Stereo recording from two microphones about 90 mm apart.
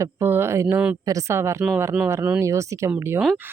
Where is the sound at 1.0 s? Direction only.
40° right (ahead or behind).